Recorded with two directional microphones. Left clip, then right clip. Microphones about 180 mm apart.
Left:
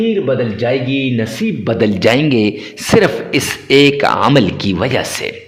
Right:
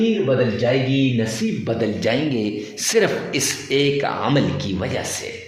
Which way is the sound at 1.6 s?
50° left (ahead or behind).